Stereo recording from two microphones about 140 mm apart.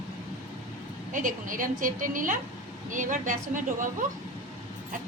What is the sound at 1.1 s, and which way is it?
A woman's voice, 70° right (ahead or behind).